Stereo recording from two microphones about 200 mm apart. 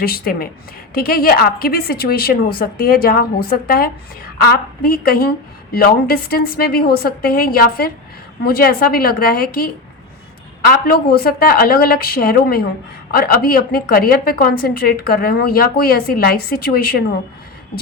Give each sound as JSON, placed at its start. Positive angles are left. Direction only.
{"t": 0.0, "sound": "a woman's voice", "side_deg": 50}
{"t": 10.7, "sound": "a woman's voice", "side_deg": 50}